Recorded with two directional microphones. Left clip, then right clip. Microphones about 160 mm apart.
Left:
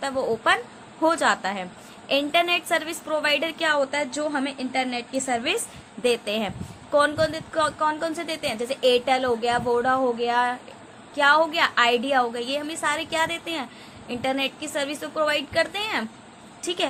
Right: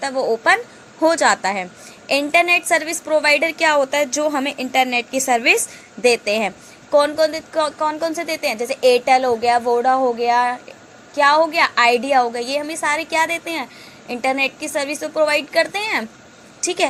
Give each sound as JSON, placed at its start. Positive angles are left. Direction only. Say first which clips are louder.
{"t": 0.0, "sound": "a woman's voice", "louder": "right 6 dB", "side_deg": -25}